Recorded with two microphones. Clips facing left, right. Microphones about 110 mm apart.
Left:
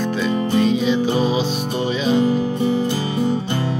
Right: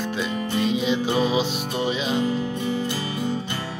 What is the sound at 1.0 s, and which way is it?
Music, 30° left (ahead or behind).